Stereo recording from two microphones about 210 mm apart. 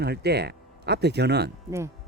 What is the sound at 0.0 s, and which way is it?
Speech, 50° right (ahead or behind).